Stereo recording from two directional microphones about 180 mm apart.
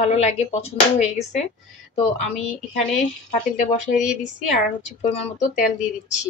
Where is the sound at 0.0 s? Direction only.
35° left (ahead or behind).